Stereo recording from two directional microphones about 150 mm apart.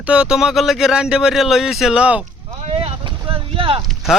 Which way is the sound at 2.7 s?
40° right (ahead or behind).